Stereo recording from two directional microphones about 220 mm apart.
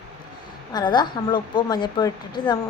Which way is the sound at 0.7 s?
20° left (ahead or behind).